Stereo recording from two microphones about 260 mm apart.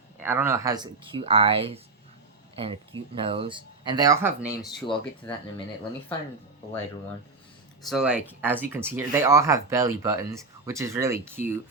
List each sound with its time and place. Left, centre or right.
0.2 s speech: centre
4.4 s speech: centre
7.8 s speech: centre